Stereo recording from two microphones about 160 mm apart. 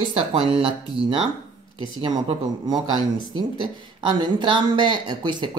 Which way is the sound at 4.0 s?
30° right (ahead or behind).